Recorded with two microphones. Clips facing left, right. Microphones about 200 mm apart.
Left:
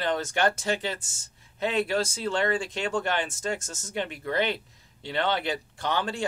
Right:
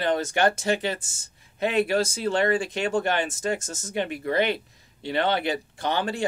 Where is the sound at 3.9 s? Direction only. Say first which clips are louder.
Right 4 dB; 10° right (ahead or behind).